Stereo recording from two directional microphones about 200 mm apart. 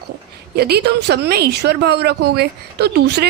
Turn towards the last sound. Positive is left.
turn(degrees=-55)  # may be behind; listen again after turning